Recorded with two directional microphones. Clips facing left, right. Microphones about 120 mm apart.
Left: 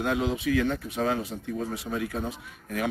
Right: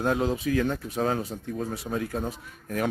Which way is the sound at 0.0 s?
40° right (ahead or behind).